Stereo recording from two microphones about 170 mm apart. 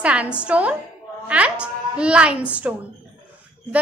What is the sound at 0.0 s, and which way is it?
A woman's voice, 5° right (ahead or behind).